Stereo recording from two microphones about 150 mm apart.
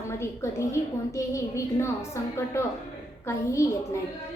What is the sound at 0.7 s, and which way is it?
A woman's voice, 20° left (ahead or behind).